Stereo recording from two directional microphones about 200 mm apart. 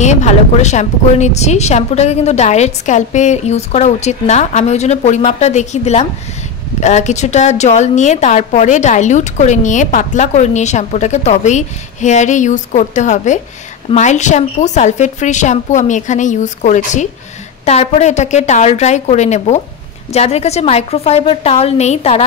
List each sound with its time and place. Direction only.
0.0 s a woman's voice: 35° left (ahead or behind)